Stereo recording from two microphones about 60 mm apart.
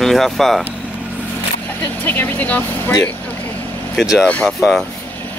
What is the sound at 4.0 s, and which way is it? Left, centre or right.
Speech, centre.